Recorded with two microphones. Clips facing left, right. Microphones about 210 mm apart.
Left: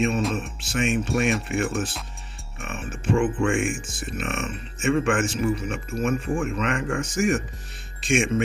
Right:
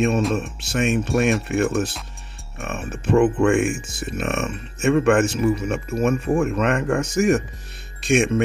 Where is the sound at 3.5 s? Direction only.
40° right (ahead or behind).